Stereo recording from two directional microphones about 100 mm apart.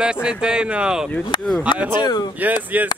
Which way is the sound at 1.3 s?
50° left (ahead or behind).